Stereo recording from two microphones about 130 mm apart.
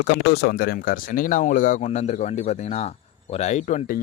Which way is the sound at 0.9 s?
90° left.